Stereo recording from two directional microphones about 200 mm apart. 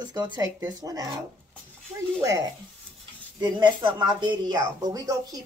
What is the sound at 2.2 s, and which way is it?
A woman's voice, 15° right (ahead or behind).